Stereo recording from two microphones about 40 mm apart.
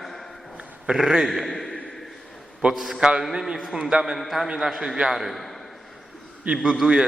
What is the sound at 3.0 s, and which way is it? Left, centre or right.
A man's voice, centre.